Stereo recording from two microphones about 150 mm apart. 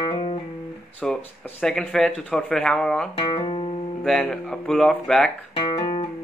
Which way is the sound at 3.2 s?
35° left (ahead or behind).